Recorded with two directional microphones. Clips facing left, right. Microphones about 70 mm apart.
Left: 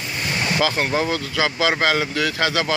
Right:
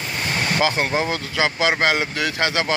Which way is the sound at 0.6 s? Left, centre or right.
Right.